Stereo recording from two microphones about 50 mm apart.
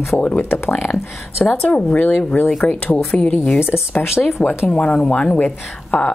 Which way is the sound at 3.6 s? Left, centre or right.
Left.